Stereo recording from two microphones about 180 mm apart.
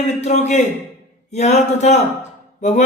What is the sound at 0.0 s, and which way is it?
A man's voice, 40° left (ahead or behind).